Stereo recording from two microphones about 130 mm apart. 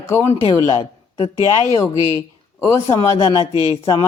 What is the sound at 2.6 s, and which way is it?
Speech, 20° left (ahead or behind).